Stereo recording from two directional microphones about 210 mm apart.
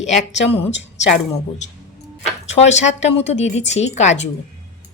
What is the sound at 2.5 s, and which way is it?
Speech, 35° left (ahead or behind).